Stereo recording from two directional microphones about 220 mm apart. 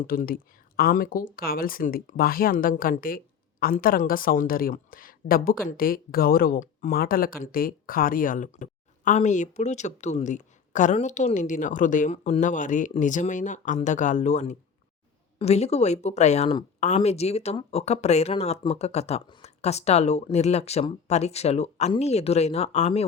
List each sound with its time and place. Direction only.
0.0 s a woman's voice: 40° left (ahead or behind)